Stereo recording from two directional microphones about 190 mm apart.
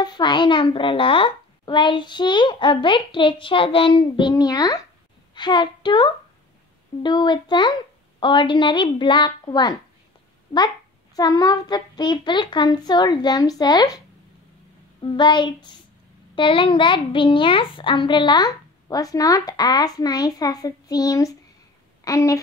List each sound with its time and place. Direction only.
0.0 s a child's voice: 25° left (ahead or behind)
11.1 s a child's voice: 20° left (ahead or behind)